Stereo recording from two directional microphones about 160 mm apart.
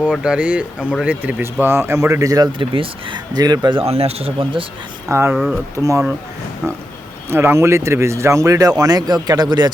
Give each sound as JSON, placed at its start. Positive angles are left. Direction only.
{"t": 0.0, "sound": "speech", "side_deg": -5}
{"t": 5.0, "sound": "speech", "side_deg": -15}
{"t": 7.3, "sound": "speech", "side_deg": -15}